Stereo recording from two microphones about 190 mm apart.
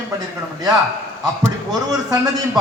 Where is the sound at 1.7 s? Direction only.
20° right (ahead or behind).